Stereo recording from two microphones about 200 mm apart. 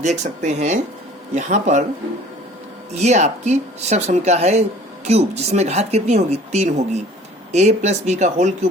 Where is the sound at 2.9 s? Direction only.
35° right (ahead or behind).